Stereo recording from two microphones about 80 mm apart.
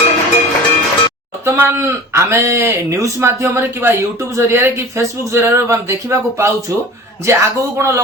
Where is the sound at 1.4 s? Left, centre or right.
Right.